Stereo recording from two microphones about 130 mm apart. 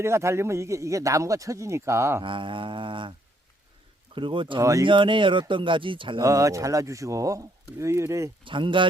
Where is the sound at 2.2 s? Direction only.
40° right (ahead or behind).